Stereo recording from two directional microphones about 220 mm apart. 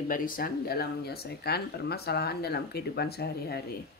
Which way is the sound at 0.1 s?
40° left (ahead or behind).